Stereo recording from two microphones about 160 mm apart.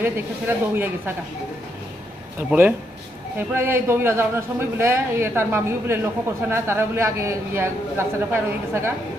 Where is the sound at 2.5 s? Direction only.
10° right (ahead or behind).